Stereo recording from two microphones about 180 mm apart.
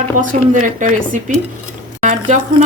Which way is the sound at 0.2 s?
45° right (ahead or behind).